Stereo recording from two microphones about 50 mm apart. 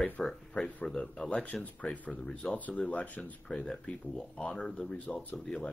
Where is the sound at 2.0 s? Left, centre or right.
Centre.